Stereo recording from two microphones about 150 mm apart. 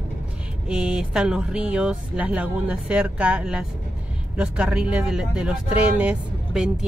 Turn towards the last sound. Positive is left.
turn(degrees=-5)  # may be behind; listen again after turning